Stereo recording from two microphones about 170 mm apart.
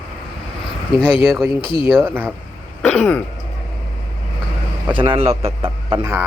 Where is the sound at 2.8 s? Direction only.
10° left (ahead or behind).